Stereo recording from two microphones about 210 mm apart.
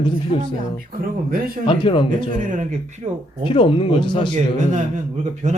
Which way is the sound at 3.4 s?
25° left (ahead or behind).